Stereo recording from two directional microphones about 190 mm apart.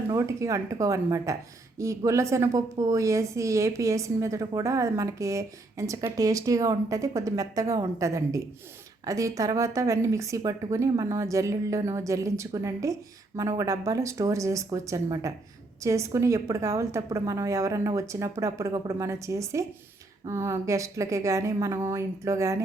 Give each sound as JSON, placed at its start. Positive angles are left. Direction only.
{"t": 0.1, "sound": "a woman's voice", "side_deg": -15}